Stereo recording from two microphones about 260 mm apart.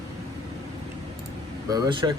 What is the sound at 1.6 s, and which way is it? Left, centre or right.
Speech, centre.